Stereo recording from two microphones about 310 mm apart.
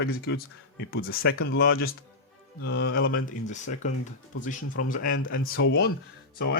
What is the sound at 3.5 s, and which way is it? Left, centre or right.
Speech, left.